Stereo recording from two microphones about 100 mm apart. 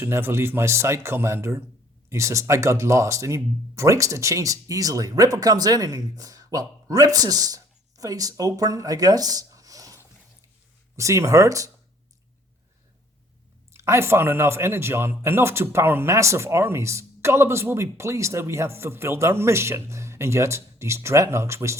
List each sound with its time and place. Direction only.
0.0 s speech: 25° right (ahead or behind)
13.7 s speech: 25° right (ahead or behind)